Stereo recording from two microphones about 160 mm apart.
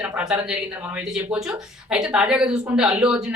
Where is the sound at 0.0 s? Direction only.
5° right (ahead or behind).